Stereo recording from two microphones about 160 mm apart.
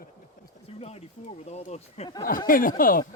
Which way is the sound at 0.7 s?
40° left (ahead or behind).